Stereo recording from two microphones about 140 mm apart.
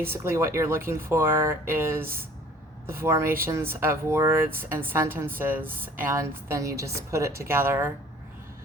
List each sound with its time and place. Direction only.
0.0 s a woman's voice: 20° right (ahead or behind)